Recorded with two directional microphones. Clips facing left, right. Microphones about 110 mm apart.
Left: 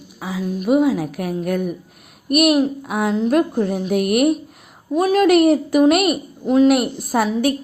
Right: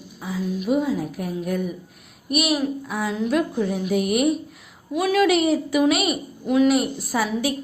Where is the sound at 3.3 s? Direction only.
50° left (ahead or behind).